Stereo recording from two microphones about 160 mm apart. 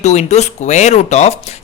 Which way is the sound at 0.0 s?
45° left (ahead or behind).